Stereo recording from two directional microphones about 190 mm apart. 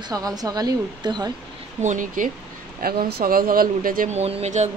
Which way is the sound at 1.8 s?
40° right (ahead or behind).